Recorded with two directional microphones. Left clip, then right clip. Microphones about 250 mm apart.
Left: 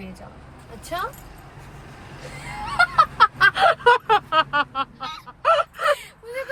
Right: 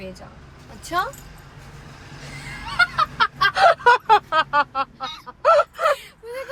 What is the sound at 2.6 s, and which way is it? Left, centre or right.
Fowl, centre.